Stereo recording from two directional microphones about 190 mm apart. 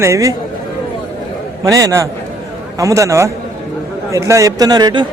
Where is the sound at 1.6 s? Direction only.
15° right (ahead or behind).